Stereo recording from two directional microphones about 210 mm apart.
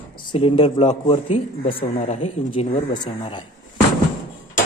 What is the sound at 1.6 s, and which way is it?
Speech, 40° left (ahead or behind).